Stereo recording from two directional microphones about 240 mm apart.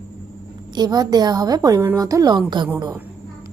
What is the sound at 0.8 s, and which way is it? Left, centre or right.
A woman's voice, centre.